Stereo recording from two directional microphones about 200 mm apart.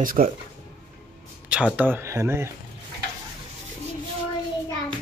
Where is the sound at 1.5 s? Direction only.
5° right (ahead or behind).